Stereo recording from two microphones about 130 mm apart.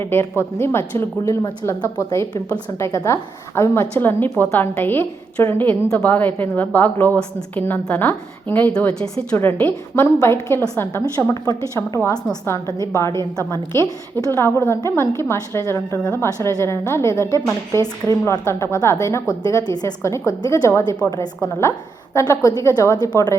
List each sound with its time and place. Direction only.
0.0 s a woman's voice: 20° left (ahead or behind)
8.9 s speech: 45° right (ahead or behind)
9.3 s a woman's voice: 15° left (ahead or behind)